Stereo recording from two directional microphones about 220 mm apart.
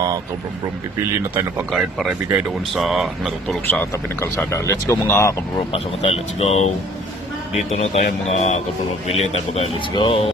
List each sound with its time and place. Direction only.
1.7 s speech: centre (ahead or behind)
5.7 s speech: 30° left (ahead or behind)
7.7 s a man's voice: 30° left (ahead or behind)